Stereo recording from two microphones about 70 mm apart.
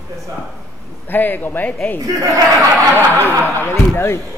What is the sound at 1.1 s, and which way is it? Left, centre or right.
Speech, left.